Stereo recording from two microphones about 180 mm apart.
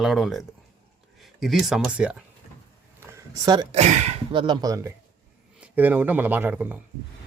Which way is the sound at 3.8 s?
40° right (ahead or behind).